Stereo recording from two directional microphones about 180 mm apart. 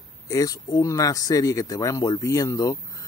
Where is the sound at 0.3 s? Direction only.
20° left (ahead or behind).